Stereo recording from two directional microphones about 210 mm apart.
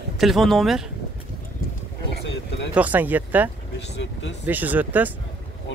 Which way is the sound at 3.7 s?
55° left (ahead or behind).